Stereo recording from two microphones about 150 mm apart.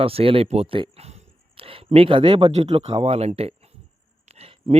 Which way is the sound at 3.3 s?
40° right (ahead or behind).